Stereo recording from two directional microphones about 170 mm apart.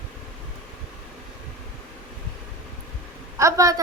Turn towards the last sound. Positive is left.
turn(degrees=-20)  # may be behind; listen again after turning